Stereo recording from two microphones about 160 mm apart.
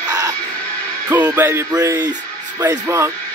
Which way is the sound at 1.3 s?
15° right (ahead or behind).